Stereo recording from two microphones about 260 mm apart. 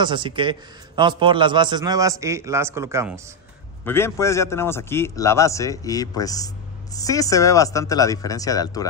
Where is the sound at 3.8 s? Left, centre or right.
Centre.